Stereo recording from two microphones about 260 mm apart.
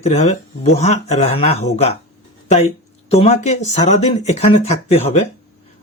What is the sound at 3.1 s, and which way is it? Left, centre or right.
Speech, left.